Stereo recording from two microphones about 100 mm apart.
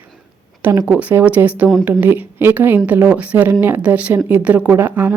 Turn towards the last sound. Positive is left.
turn(degrees=-20)  # may be behind; listen again after turning